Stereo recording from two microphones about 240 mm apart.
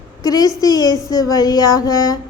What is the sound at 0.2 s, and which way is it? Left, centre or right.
A woman's voice, centre.